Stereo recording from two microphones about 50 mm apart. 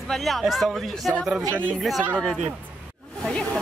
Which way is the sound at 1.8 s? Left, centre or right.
Centre.